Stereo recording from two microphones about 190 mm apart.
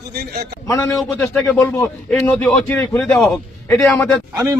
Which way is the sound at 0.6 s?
15° left (ahead or behind).